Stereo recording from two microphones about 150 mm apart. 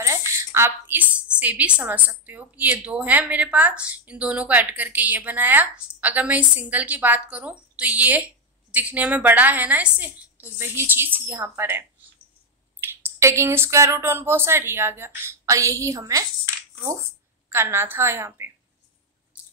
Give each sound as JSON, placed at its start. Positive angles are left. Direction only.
{"t": 0.3, "sound": "a woman's voice", "side_deg": -20}
{"t": 12.8, "sound": "a woman's voice", "side_deg": -20}
{"t": 17.5, "sound": "a woman's voice", "side_deg": -15}